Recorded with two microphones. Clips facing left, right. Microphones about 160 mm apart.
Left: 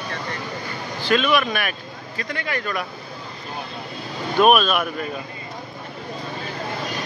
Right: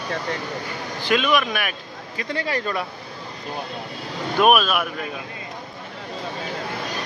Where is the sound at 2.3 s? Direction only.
30° right (ahead or behind).